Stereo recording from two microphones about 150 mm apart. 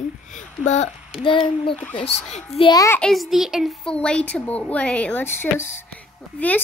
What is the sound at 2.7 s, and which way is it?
Speech, 25° left (ahead or behind).